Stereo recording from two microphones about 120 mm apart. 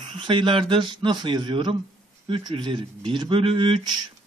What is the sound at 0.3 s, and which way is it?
A man's voice, 45° right (ahead or behind).